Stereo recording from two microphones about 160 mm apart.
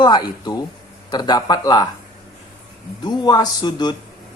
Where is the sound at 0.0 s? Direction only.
25° left (ahead or behind).